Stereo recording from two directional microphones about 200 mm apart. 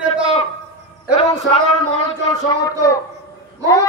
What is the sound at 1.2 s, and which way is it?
Speech, 30° left (ahead or behind).